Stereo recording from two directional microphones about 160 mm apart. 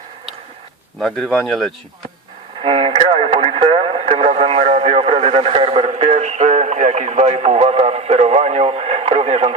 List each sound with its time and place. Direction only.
0.9 s speech: centre (ahead or behind)
2.6 s radio: 35° right (ahead or behind)